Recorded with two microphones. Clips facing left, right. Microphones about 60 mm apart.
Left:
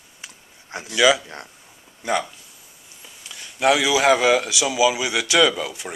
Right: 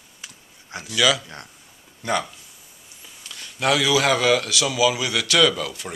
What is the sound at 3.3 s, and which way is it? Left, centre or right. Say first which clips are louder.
A man's voice: left 3 dB; centre.